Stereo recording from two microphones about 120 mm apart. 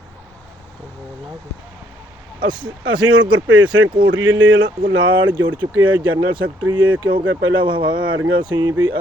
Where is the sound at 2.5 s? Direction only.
40° right (ahead or behind).